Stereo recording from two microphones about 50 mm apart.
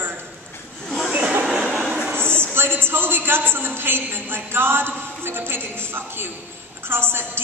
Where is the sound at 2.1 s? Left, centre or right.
Right.